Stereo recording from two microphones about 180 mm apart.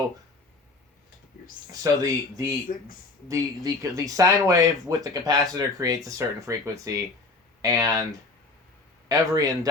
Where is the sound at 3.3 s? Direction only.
15° right (ahead or behind).